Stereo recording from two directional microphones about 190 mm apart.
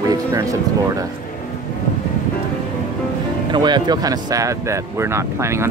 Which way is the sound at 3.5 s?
25° right (ahead or behind).